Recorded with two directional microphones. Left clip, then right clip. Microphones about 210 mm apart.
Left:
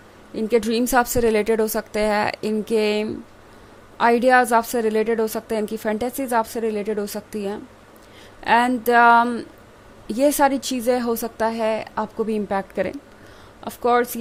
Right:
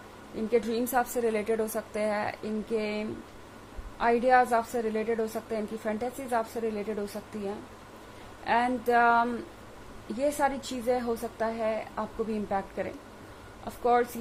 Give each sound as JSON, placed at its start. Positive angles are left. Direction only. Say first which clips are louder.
{"t": 0.3, "sound": "a woman's voice", "louder": "left 8 dB", "side_deg": 50}